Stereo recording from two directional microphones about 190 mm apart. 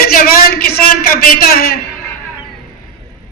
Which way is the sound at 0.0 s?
50° left (ahead or behind).